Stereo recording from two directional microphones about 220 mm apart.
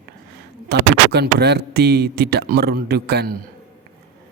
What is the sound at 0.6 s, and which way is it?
Speech, 50° right (ahead or behind).